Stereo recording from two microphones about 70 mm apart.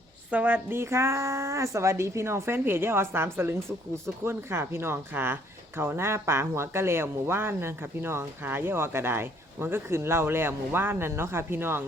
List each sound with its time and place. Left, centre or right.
0.3 s a woman's voice: right
0.8 s speech: right